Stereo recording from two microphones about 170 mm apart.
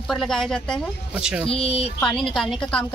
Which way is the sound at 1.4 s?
35° left (ahead or behind).